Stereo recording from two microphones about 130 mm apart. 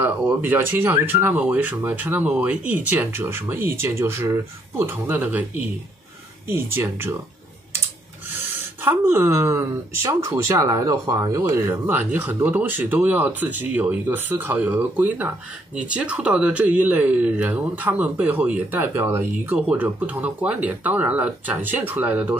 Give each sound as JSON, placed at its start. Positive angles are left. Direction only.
{"t": 0.0, "sound": "speech", "side_deg": -15}
{"t": 8.8, "sound": "speech", "side_deg": -15}